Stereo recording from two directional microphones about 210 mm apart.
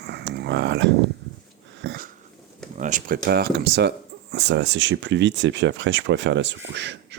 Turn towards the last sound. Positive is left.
turn(degrees=-55)  # may be behind; listen again after turning